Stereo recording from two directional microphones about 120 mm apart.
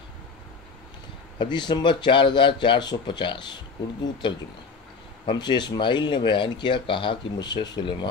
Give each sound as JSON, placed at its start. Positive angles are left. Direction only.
{"t": 1.4, "sound": "speech", "side_deg": 40}
{"t": 5.2, "sound": "speech", "side_deg": 40}